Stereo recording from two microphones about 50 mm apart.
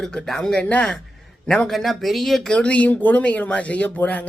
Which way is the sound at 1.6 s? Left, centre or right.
Centre.